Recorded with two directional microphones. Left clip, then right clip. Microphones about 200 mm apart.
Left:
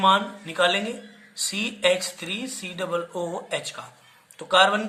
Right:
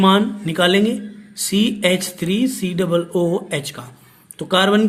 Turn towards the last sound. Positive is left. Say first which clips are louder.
# right 2 dB
turn(degrees=-40)  # may be behind; listen again after turning